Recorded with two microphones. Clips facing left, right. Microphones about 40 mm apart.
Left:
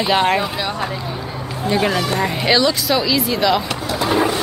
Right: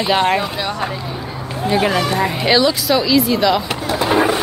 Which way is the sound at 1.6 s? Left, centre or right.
Centre.